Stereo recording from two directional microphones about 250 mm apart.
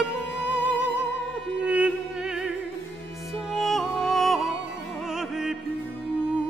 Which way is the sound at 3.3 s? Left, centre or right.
Centre.